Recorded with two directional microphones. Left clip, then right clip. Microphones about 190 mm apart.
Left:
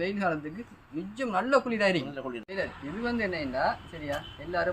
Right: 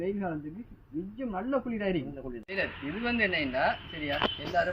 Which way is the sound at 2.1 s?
15° left (ahead or behind).